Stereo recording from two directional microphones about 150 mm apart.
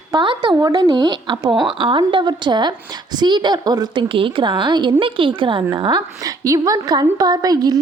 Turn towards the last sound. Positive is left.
turn(degrees=-25)  # may be behind; listen again after turning